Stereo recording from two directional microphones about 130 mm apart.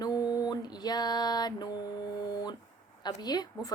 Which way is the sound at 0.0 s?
30° left (ahead or behind).